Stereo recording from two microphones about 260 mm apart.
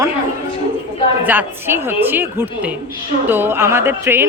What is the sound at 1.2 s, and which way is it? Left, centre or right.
Speech, centre.